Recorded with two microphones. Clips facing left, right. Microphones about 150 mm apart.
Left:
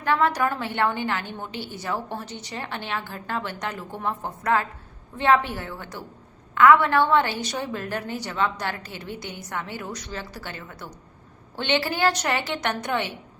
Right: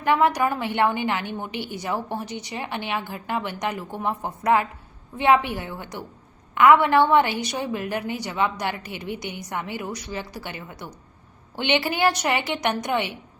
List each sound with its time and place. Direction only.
0.0 s a woman's voice: 15° right (ahead or behind)